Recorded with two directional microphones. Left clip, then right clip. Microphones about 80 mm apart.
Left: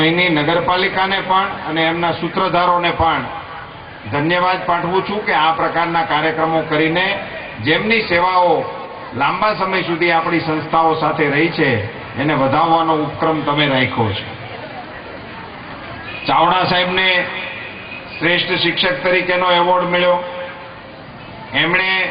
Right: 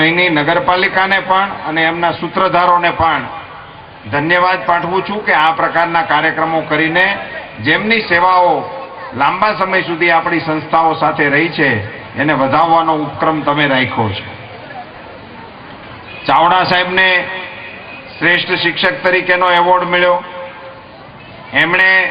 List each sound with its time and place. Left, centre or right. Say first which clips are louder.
0.0 s a man's voice: right 3 dB; right
16.2 s a man's voice: right 4 dB; right
21.5 s a man's voice: right 6 dB; right